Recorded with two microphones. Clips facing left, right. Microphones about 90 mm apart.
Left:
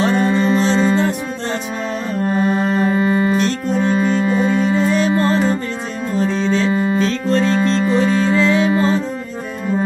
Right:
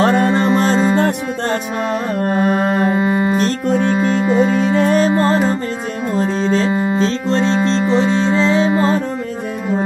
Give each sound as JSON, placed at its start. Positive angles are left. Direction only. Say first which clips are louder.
{"t": 0.0, "sound": "music", "louder": "right 2 dB", "side_deg": -55}
{"t": 0.6, "sound": "music", "louder": "right 1 dB", "side_deg": -45}
{"t": 2.9, "sound": "music", "louder": "even", "side_deg": -20}
{"t": 4.6, "sound": "music", "louder": "right 2 dB", "side_deg": -65}
{"t": 5.1, "sound": "music", "louder": "right 1 dB", "side_deg": -30}